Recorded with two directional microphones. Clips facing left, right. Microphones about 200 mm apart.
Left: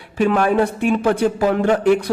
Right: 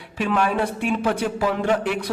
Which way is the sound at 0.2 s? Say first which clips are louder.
Left 6 dB; 45° left (ahead or behind).